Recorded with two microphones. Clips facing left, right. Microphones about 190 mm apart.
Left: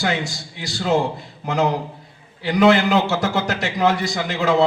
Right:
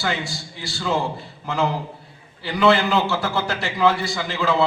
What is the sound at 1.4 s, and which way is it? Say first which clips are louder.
A man's voice: left 3 dB; 40° left (ahead or behind).